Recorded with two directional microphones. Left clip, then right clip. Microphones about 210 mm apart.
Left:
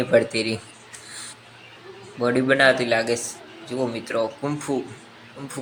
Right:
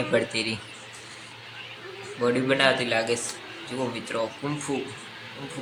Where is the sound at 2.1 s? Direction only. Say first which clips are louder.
Left 4 dB; 15° left (ahead or behind).